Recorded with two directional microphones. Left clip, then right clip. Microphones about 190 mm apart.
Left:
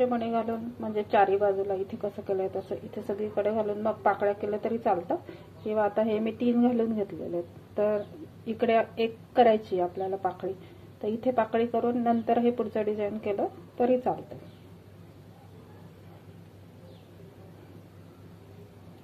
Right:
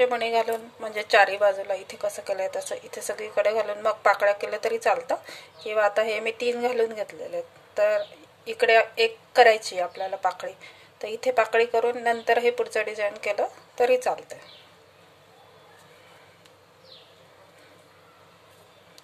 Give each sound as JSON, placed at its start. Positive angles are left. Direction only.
{"t": 0.0, "sound": "a woman's voice", "side_deg": -30}